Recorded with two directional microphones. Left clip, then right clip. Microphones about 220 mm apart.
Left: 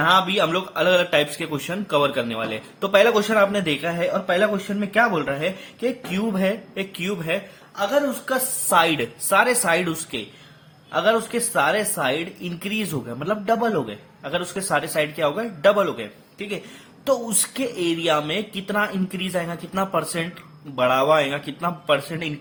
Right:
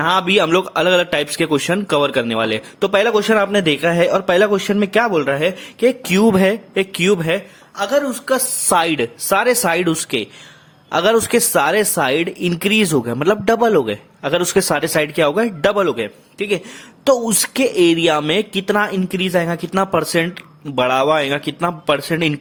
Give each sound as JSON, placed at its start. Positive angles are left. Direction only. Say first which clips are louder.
{"t": 0.0, "sound": "a man's voice", "louder": "right 3 dB", "side_deg": -50}